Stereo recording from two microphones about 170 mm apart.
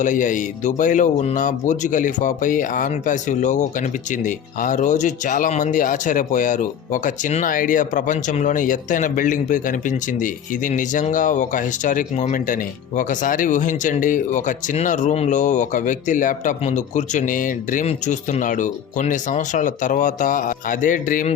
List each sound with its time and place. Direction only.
0.0 s speech: 50° left (ahead or behind)